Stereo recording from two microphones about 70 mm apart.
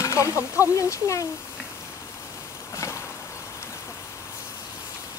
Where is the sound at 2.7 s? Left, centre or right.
Left.